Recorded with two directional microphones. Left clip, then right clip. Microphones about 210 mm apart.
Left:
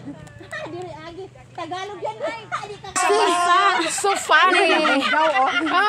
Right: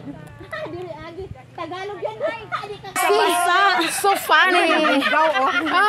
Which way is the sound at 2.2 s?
35° left (ahead or behind).